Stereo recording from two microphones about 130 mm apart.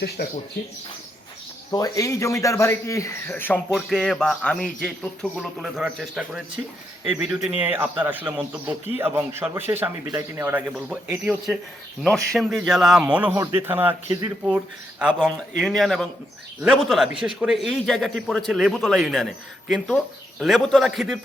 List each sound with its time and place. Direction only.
1.7 s speech: 25° left (ahead or behind)
3.7 s a man's voice: centre (ahead or behind)
5.4 s a man's voice: 5° right (ahead or behind); by 10.6 s 20° right (ahead or behind)
10.7 s a man's voice: 5° right (ahead or behind)
13.3 s speech: 20° right (ahead or behind)
14.4 s a man's voice: 10° right (ahead or behind)